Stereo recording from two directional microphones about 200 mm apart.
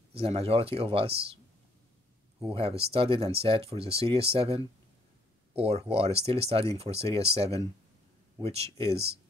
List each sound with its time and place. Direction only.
0.1 s speech: 30° right (ahead or behind)
2.5 s speech: 30° right (ahead or behind)